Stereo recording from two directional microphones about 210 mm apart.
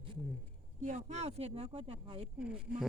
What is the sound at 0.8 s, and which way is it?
Speech, 35° right (ahead or behind).